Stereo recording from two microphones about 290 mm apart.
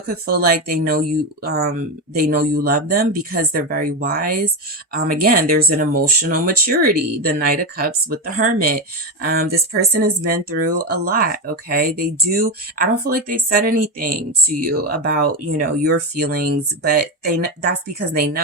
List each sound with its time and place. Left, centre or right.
0.1 s speech: right